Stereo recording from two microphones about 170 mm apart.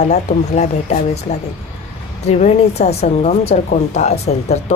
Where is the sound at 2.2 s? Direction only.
40° left (ahead or behind).